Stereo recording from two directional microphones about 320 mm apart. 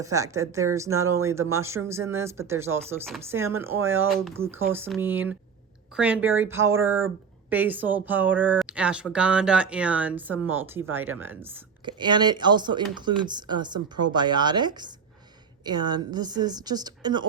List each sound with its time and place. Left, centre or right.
0.0 s speech: centre